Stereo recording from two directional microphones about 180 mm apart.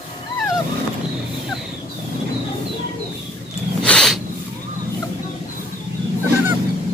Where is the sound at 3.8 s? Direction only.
5° left (ahead or behind).